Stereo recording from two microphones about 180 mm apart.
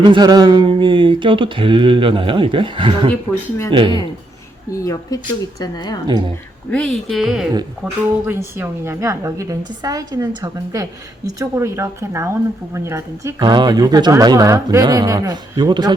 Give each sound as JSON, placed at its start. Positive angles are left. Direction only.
{"t": 0.0, "sound": "speech", "side_deg": -25}
{"t": 4.7, "sound": "speech", "side_deg": 20}
{"t": 6.7, "sound": "speech", "side_deg": 5}
{"t": 8.3, "sound": "a woman's voice", "side_deg": -10}